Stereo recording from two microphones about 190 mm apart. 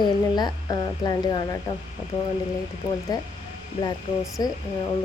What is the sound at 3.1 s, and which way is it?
Speech, 20° left (ahead or behind).